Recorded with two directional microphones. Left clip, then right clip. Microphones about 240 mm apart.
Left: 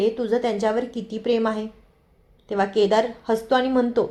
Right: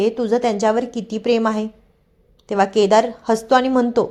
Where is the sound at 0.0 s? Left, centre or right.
Right.